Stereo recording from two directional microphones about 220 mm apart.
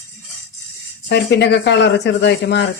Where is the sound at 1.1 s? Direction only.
50° left (ahead or behind).